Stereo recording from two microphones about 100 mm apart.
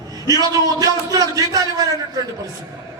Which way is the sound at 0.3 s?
40° right (ahead or behind).